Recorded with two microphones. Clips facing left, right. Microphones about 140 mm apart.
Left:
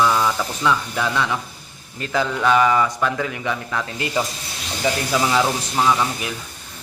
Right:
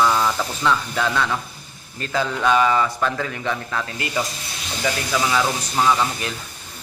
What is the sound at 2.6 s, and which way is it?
Speech, 15° left (ahead or behind).